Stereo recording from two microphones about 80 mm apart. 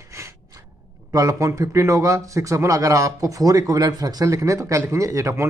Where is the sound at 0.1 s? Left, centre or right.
Right.